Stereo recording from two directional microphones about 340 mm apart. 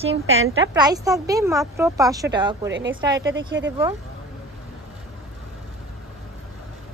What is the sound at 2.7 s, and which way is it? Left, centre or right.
Speech, right.